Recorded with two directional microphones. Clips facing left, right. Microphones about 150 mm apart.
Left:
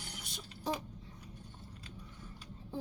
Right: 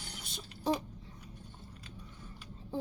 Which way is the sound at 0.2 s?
30° right (ahead or behind).